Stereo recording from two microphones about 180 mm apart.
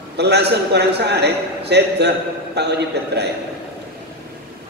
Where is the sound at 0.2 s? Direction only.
65° right (ahead or behind).